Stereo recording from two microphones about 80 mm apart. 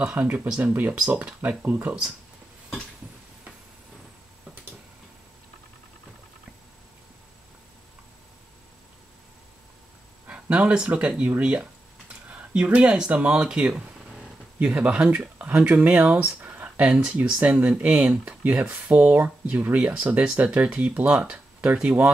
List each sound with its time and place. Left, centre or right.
0.0 s speech: centre
10.2 s speech: centre